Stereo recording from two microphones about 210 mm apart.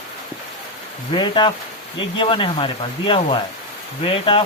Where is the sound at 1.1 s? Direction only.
20° left (ahead or behind).